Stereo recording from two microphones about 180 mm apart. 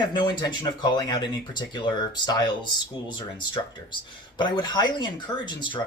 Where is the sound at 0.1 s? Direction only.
25° left (ahead or behind).